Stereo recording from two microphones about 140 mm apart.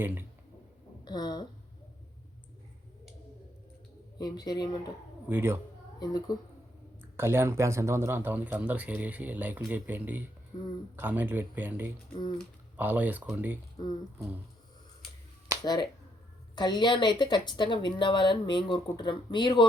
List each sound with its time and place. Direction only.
0.0 s speech: 15° right (ahead or behind)
1.0 s a man's voice: 30° left (ahead or behind)
4.2 s a man's voice: 30° left (ahead or behind)
5.3 s speech: 15° right (ahead or behind)
6.0 s a man's voice: 30° left (ahead or behind)
7.2 s speech: 20° right (ahead or behind)
13.8 s speech: 30° left (ahead or behind)
15.6 s a man's voice: 30° left (ahead or behind)